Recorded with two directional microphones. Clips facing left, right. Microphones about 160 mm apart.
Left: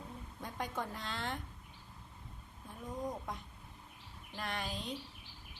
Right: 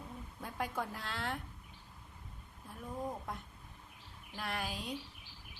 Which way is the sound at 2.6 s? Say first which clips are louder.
Even; centre (ahead or behind).